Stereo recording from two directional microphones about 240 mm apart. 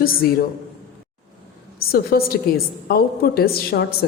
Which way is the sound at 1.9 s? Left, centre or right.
Left.